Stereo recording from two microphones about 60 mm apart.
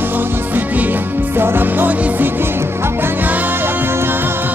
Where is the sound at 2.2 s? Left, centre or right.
Right.